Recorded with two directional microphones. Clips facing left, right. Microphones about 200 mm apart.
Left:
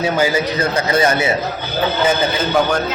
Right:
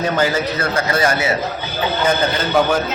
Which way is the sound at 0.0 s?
10° left (ahead or behind).